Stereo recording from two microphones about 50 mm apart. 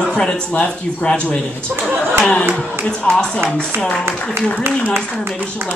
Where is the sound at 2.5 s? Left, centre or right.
Left.